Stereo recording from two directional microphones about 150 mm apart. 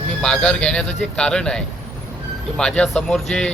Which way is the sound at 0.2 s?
5° left (ahead or behind).